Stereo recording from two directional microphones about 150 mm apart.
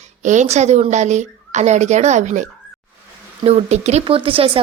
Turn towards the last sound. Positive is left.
turn(degrees=-40)  # may be behind; listen again after turning